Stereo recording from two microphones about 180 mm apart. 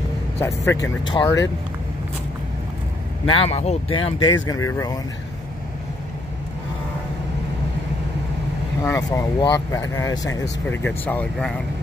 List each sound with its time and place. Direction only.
0.4 s a man's voice: 15° left (ahead or behind)
1.0 s speech: 25° left (ahead or behind)
3.3 s speech: 30° left (ahead or behind)
4.5 s speech: 15° left (ahead or behind)
8.8 s a man's voice: 15° left (ahead or behind)